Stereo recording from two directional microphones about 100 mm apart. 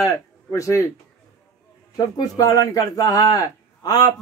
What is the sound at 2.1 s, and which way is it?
A man's voice, 40° left (ahead or behind).